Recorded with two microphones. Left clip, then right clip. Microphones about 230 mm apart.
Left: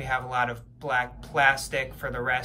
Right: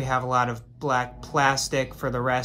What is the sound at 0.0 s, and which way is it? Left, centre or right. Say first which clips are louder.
Speech: right 3 dB; centre.